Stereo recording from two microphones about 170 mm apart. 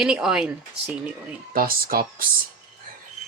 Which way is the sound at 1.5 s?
55° right (ahead or behind).